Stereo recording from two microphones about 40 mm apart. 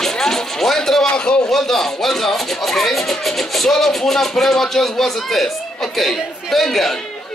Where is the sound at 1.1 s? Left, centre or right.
Left.